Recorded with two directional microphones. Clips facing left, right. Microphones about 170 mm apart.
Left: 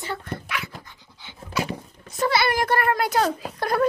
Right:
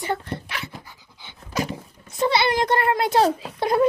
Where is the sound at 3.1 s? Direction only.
30° right (ahead or behind).